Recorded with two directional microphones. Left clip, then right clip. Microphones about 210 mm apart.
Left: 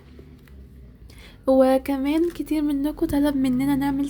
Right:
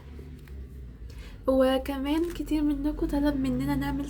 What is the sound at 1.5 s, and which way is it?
A woman's voice, 45° left (ahead or behind).